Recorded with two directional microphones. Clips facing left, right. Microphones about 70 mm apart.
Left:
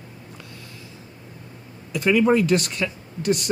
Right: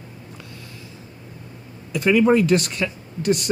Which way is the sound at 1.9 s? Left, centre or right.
Right.